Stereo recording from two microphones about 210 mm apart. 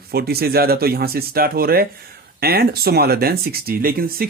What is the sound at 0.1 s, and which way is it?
Speech, 50° right (ahead or behind).